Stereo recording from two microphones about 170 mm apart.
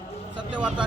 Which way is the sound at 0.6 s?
5° right (ahead or behind).